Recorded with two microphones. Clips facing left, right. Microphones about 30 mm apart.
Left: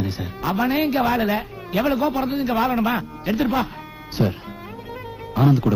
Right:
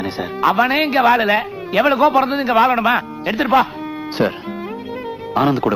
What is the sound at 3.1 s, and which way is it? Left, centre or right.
Music, right.